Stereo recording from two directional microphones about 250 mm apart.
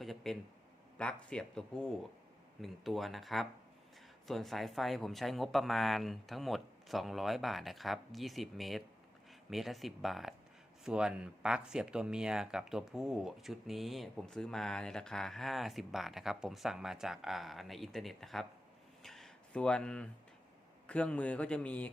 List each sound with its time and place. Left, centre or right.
0.0 s speech: centre
19.0 s a sound: centre
20.8 s speech: centre